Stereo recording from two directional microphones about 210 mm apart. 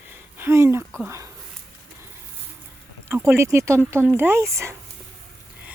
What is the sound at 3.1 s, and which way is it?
Speech, 10° right (ahead or behind).